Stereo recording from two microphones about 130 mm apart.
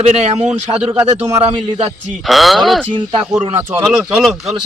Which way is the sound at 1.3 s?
50° right (ahead or behind).